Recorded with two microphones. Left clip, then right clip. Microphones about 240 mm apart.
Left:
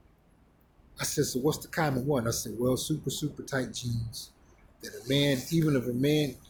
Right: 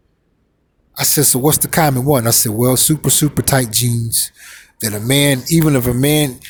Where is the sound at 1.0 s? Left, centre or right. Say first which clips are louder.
Right 14 dB; right.